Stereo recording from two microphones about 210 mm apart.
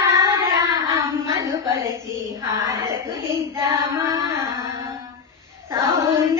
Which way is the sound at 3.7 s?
15° right (ahead or behind).